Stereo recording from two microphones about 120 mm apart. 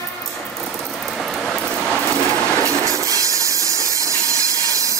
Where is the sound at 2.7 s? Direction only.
25° right (ahead or behind).